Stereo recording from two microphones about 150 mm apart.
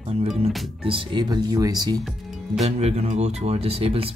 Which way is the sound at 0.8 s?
35° right (ahead or behind).